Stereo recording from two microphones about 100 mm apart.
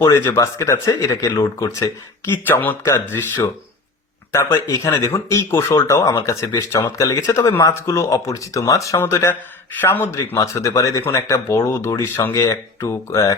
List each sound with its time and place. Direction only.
0.1 s speech: 30° left (ahead or behind)
2.2 s speech: 20° left (ahead or behind)
4.3 s speech: 25° left (ahead or behind)